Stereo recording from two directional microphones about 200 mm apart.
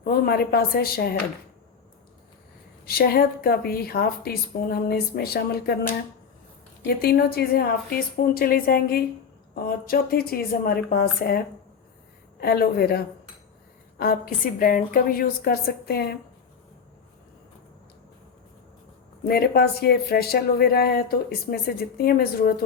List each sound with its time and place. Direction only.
0.0 s speech: 50° left (ahead or behind)
2.8 s speech: 50° left (ahead or behind)
6.8 s speech: 50° left (ahead or behind)
19.3 s speech: 50° left (ahead or behind)